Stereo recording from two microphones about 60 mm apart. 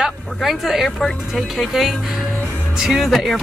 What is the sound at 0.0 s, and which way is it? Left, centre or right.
Speech, centre.